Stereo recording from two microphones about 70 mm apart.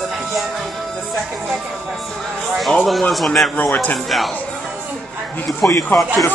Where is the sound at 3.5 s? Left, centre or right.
Left.